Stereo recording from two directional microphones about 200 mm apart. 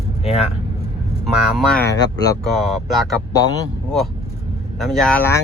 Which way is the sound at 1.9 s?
20° left (ahead or behind).